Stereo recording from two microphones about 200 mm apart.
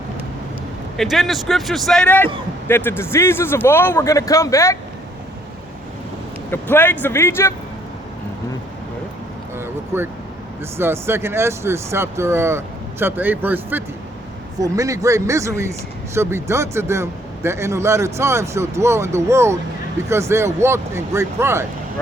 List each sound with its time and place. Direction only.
0.9 s a man's voice: centre (ahead or behind); by 4.8 s 15° left (ahead or behind)
6.5 s speech: 10° left (ahead or behind)
9.6 s a sound: 10° right (ahead or behind)
10.8 s a man's voice: 10° right (ahead or behind)